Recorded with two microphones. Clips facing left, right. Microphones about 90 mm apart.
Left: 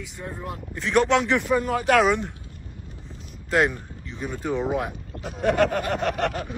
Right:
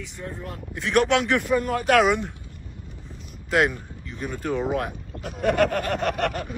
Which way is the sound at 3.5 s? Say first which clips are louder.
Even; 5° right (ahead or behind).